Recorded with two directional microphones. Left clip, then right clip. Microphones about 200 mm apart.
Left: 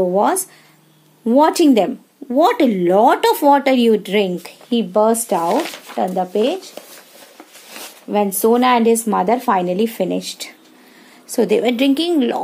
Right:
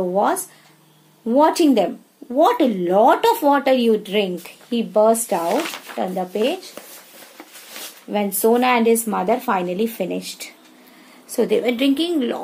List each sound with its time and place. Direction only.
0.1 s speech: 50° left (ahead or behind)
8.1 s speech: 40° left (ahead or behind)